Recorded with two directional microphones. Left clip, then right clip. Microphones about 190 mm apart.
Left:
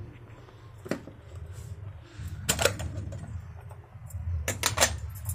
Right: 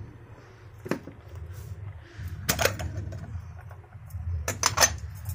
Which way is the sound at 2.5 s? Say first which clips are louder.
Right 1 dB; 20° right (ahead or behind).